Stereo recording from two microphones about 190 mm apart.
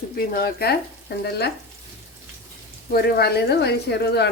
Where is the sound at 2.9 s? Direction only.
60° left (ahead or behind).